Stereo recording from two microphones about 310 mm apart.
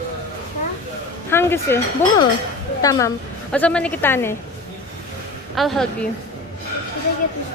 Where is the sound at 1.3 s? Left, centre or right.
Centre.